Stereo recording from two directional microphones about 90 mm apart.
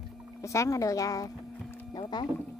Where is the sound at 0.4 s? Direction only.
35° left (ahead or behind).